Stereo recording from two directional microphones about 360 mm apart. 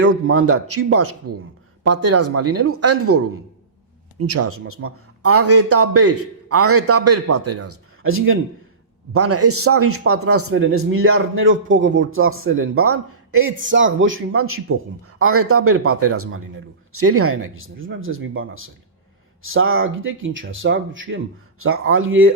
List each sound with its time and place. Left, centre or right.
0.0 s a man's voice: right